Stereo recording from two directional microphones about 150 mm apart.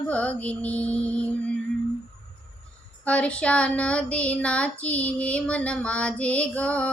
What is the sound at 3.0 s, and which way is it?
Child singing, 10° left (ahead or behind).